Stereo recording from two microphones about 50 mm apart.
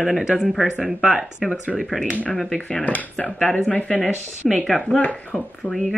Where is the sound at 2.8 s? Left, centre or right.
Left.